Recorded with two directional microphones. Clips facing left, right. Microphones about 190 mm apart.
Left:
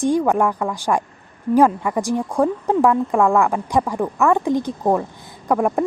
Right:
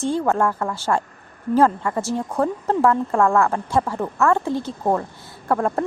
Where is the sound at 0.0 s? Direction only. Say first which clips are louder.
Left 3 dB; 15° left (ahead or behind).